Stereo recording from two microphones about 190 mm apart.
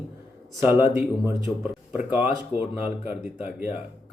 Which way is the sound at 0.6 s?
10° right (ahead or behind).